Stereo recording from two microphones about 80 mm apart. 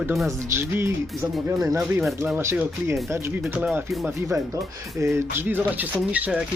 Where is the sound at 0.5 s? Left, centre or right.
Right.